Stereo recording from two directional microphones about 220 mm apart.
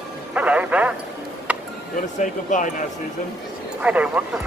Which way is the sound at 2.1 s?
35° left (ahead or behind).